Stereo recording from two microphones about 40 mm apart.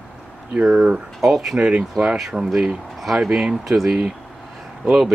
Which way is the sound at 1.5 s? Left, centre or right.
Right.